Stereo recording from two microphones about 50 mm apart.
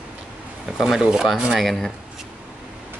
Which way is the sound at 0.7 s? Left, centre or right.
Centre.